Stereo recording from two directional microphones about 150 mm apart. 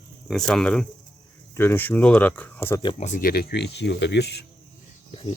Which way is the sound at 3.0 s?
60° left (ahead or behind).